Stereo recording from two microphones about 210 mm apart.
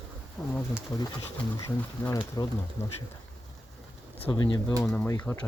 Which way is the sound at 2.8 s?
30° left (ahead or behind).